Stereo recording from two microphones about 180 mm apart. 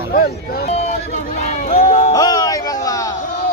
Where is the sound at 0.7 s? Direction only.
35° left (ahead or behind).